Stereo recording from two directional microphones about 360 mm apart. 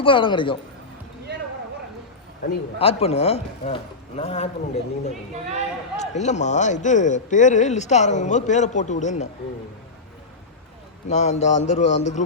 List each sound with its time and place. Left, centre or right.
0.0 s a man's voice: centre
1.3 s a sound: right
2.7 s a man's voice: centre
11.1 s a man's voice: centre
11.5 s a man's voice: left
11.8 s a man's voice: centre